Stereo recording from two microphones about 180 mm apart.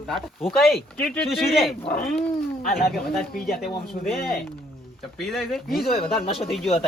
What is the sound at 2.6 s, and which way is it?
Speech, 50° left (ahead or behind).